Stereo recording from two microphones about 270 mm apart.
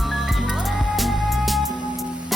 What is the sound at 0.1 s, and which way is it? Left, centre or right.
Music, centre.